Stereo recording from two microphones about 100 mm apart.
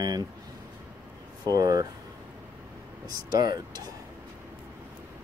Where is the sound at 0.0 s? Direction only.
40° right (ahead or behind).